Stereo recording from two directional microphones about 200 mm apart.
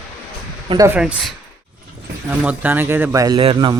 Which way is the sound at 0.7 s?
25° right (ahead or behind).